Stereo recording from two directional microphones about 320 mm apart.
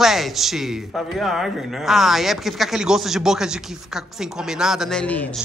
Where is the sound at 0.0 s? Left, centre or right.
Centre.